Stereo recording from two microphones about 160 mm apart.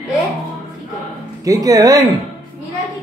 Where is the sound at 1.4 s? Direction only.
20° right (ahead or behind).